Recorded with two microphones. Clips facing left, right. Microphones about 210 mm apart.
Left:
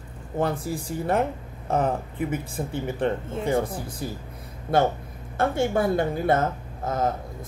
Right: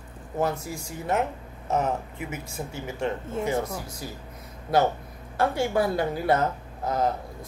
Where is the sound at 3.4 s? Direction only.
30° left (ahead or behind).